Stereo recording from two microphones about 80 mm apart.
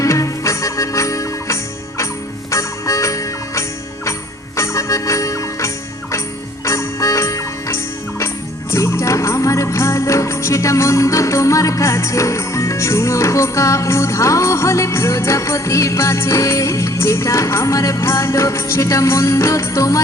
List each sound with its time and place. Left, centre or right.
0.0 s music: left